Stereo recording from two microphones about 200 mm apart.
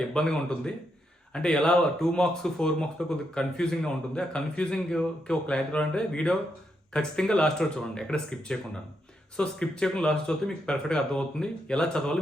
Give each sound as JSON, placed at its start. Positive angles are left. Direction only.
{"t": 0.1, "sound": "a man's voice", "side_deg": 5}